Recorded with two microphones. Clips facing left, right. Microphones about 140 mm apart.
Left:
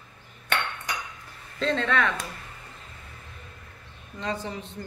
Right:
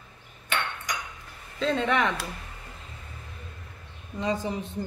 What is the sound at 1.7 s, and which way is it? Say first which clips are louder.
Speech: right 1 dB; 15° right (ahead or behind).